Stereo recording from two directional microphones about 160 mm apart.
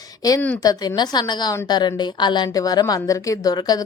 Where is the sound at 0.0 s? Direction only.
25° left (ahead or behind).